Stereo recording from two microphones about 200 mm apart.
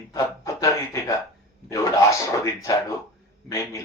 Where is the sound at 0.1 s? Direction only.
15° left (ahead or behind).